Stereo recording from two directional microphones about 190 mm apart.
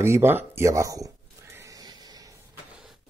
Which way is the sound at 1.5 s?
20° right (ahead or behind).